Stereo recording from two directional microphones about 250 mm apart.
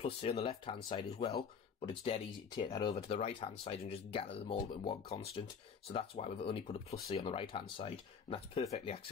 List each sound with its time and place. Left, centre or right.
0.0 s speech: left